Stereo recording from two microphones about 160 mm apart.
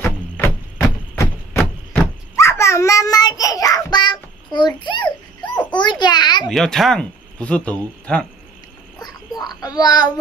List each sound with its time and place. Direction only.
0.4 s a sound: 15° left (ahead or behind)
2.3 s child singing: 15° left (ahead or behind)
5.7 s babbling: 30° left (ahead or behind)
6.4 s speech: 5° left (ahead or behind)
9.0 s a sound: 25° left (ahead or behind)
9.6 s a child's voice: 25° left (ahead or behind)